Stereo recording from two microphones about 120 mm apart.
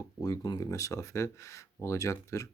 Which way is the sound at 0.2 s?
30° left (ahead or behind).